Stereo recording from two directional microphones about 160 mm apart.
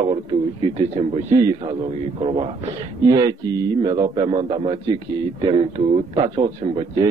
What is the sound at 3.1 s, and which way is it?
A man's voice, 25° right (ahead or behind).